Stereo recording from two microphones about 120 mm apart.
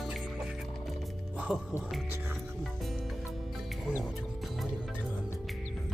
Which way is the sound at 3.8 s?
5° right (ahead or behind).